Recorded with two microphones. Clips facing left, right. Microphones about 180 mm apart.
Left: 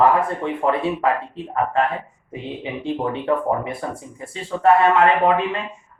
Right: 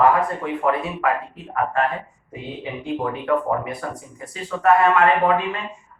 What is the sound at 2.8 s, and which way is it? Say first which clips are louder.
Speech: left 2 dB; 30° left (ahead or behind).